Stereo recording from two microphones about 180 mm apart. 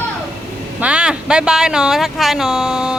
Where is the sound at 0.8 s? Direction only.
5° right (ahead or behind).